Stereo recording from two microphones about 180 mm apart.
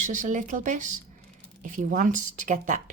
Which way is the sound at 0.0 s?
45° right (ahead or behind).